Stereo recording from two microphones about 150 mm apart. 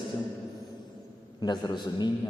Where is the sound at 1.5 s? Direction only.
30° left (ahead or behind).